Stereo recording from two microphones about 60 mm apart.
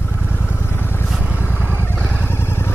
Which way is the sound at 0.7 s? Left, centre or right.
Left.